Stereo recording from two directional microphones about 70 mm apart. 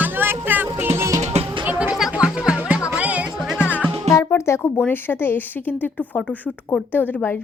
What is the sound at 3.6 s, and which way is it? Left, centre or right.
Music, left.